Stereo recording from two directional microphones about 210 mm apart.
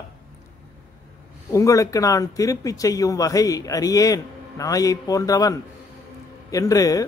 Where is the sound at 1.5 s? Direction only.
15° left (ahead or behind).